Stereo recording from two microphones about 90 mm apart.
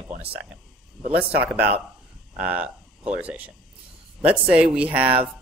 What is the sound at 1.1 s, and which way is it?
Speech, 15° right (ahead or behind).